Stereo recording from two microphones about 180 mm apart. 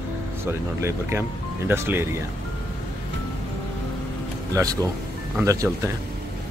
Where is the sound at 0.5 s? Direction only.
15° right (ahead or behind).